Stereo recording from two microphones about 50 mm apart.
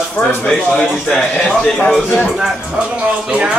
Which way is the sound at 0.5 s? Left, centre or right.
Centre.